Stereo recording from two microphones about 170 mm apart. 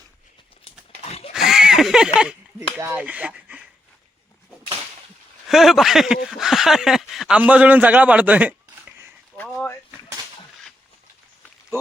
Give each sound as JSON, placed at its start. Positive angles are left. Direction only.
{"t": 1.0, "sound": "pig", "side_deg": 35}
{"t": 1.3, "sound": "a sound", "side_deg": -5}
{"t": 2.1, "sound": "speech", "side_deg": -5}
{"t": 5.5, "sound": "a man's voice", "side_deg": 0}
{"t": 9.4, "sound": "a sound", "side_deg": 10}
{"t": 11.7, "sound": "speech", "side_deg": -15}